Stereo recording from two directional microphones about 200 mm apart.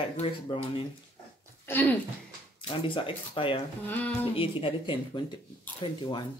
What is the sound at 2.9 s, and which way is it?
Speech, 25° left (ahead or behind).